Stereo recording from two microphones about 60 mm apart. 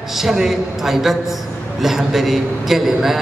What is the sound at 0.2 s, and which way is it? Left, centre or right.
A man's voice, centre.